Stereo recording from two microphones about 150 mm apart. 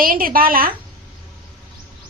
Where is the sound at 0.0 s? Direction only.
75° right (ahead or behind).